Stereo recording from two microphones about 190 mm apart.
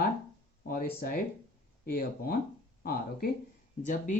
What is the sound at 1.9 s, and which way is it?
Speech, 50° left (ahead or behind).